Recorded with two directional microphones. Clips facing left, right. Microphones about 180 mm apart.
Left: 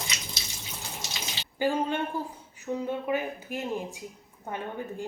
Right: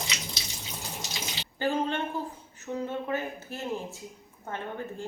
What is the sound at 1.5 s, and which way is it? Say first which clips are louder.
A woman's voice: left 1 dB; 10° left (ahead or behind).